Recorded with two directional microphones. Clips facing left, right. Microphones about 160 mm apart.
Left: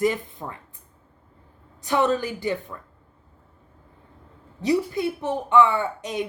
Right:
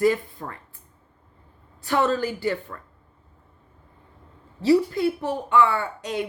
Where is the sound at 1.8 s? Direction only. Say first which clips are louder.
Even; 15° left (ahead or behind).